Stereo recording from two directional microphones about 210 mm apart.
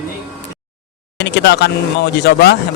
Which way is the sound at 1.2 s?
55° left (ahead or behind).